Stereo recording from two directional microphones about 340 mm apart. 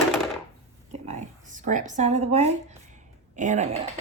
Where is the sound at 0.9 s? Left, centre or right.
Right.